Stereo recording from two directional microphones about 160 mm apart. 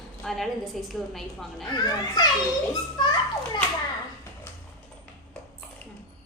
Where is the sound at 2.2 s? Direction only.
25° left (ahead or behind).